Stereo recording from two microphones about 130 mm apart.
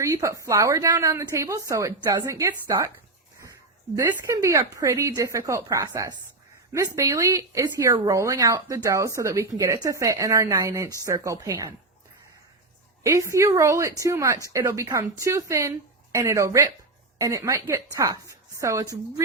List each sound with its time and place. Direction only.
0.0 s speech: 25° right (ahead or behind)
3.9 s speech: 20° right (ahead or behind)
13.0 s speech: 25° right (ahead or behind)